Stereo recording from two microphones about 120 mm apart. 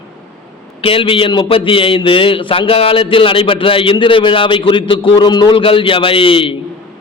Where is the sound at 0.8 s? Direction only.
50° left (ahead or behind).